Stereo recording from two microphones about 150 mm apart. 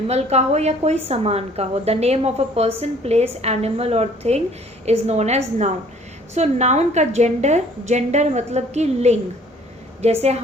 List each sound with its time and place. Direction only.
0.1 s a woman's voice: 45° right (ahead or behind)